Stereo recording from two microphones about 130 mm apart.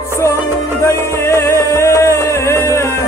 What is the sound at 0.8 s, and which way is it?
Music, 20° left (ahead or behind).